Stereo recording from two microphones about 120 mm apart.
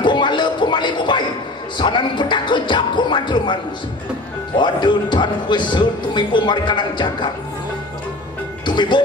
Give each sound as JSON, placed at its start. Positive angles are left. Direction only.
{"t": 0.0, "sound": "music", "side_deg": 40}
{"t": 4.6, "sound": "speech", "side_deg": 40}
{"t": 8.6, "sound": "speech", "side_deg": 40}